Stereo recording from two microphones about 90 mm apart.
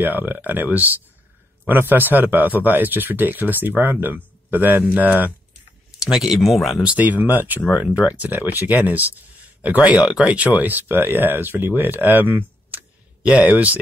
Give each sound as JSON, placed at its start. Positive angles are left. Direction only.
{"t": 0.0, "sound": "speech", "side_deg": -20}
{"t": 6.0, "sound": "speech", "side_deg": -5}
{"t": 6.8, "sound": "speech", "side_deg": -15}